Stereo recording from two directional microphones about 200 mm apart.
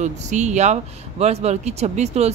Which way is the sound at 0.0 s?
35° right (ahead or behind).